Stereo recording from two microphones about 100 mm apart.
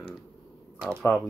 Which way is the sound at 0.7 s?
5° left (ahead or behind).